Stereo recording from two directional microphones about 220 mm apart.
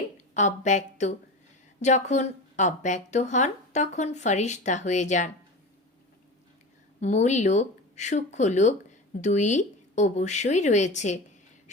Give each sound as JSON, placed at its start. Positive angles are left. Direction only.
{"t": 0.3, "sound": "speech", "side_deg": 35}
{"t": 7.0, "sound": "speech", "side_deg": 30}